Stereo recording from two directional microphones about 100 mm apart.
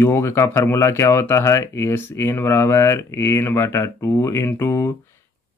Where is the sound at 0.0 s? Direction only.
25° left (ahead or behind).